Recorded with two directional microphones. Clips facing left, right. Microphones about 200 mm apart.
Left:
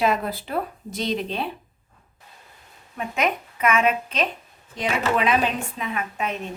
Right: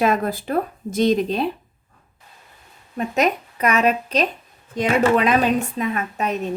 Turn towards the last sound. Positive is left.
turn(degrees=-40)  # may be behind; listen again after turning